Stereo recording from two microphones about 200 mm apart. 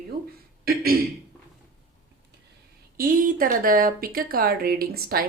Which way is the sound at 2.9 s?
45° right (ahead or behind).